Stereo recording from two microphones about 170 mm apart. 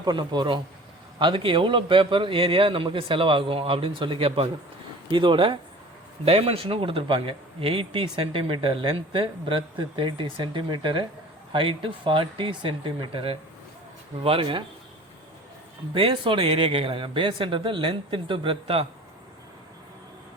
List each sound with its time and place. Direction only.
0.0 s speech: 25° right (ahead or behind)
16.0 s speech: 30° right (ahead or behind)